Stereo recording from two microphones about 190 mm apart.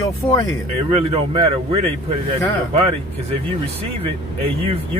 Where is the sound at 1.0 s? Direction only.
30° right (ahead or behind).